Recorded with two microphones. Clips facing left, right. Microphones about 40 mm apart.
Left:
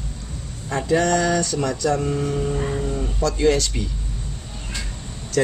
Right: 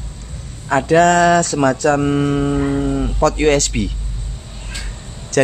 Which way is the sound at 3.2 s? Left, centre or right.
Right.